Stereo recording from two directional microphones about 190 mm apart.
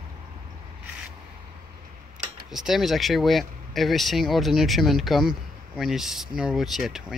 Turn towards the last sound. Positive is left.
turn(degrees=0)  # may be behind; listen again after turning